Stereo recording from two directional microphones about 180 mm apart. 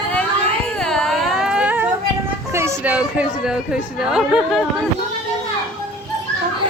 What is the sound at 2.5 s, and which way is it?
Speech, 15° right (ahead or behind).